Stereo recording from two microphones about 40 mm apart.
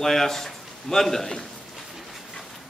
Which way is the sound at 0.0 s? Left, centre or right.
Centre.